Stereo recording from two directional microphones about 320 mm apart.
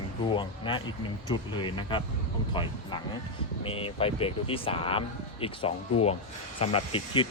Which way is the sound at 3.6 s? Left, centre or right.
Centre.